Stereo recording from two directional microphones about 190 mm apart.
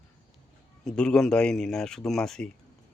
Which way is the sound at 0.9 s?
5° left (ahead or behind).